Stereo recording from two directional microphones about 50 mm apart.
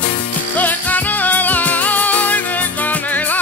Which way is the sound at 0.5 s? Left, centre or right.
Left.